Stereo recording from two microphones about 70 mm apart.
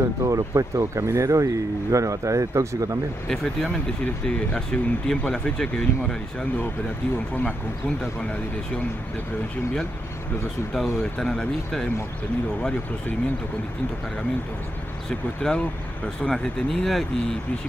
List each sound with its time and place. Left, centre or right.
0.2 s speech: right
4.0 s speech: centre
10.7 s speech: centre
15.0 s speech: centre